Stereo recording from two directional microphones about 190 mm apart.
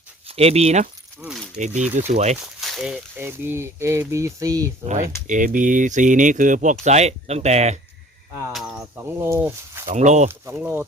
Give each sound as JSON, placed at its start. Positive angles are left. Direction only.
{"t": 0.3, "sound": "speech", "side_deg": -30}
{"t": 1.2, "sound": "a sound", "side_deg": 0}
{"t": 1.5, "sound": "speech", "side_deg": -40}
{"t": 2.6, "sound": "speech", "side_deg": 0}
{"t": 4.9, "sound": "speech", "side_deg": -40}
{"t": 8.3, "sound": "cricket", "side_deg": -15}
{"t": 8.5, "sound": "speech", "side_deg": -5}
{"t": 9.9, "sound": "speech", "side_deg": -40}
{"t": 10.2, "sound": "speech", "side_deg": -10}